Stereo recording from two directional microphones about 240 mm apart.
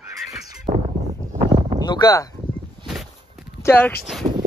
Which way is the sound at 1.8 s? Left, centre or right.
Centre.